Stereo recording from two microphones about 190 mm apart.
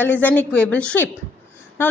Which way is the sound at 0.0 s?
10° left (ahead or behind).